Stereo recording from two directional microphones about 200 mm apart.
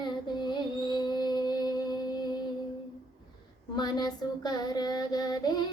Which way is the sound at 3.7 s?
20° left (ahead or behind).